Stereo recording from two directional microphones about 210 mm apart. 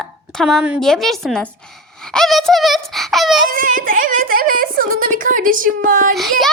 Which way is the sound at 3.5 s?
40° right (ahead or behind).